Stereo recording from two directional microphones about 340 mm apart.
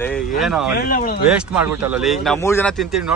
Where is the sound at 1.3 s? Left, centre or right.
Centre.